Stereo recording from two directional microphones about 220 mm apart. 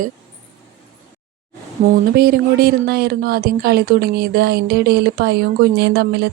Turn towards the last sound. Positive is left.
turn(degrees=-50)  # may be behind; listen again after turning